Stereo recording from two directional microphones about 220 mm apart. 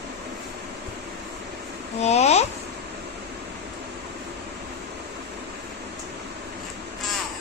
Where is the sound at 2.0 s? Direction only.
30° left (ahead or behind).